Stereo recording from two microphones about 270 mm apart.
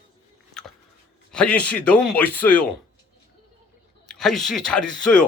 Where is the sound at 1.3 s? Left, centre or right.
Centre.